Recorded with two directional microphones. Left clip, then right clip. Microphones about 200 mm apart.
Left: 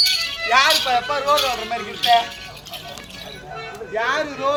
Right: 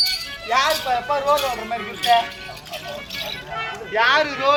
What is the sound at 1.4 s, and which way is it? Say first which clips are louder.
Music: left 2 dB; 15° right (ahead or behind).